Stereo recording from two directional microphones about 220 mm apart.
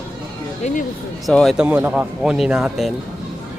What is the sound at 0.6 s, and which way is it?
Speech, 30° left (ahead or behind).